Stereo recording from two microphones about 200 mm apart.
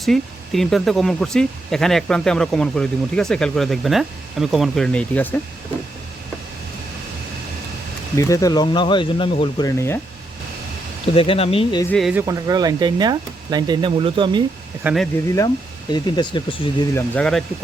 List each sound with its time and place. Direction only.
0.0 s speech: centre (ahead or behind)
8.1 s speech: 15° left (ahead or behind)
11.0 s speech: 30° left (ahead or behind)
11.9 s speech: centre (ahead or behind)
12.2 s speech: 20° right (ahead or behind)
14.8 s speech: centre (ahead or behind)
15.9 s speech: 20° left (ahead or behind)
16.9 s speech: 10° left (ahead or behind)